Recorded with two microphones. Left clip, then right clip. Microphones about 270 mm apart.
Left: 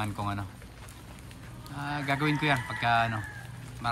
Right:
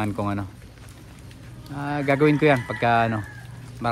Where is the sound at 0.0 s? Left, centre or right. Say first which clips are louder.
Right 7 dB; centre.